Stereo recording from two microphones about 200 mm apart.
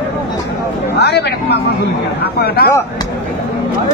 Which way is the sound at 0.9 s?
55° left (ahead or behind).